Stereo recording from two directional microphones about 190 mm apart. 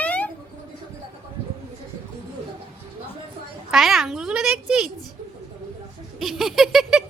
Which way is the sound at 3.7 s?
Centre (ahead or behind).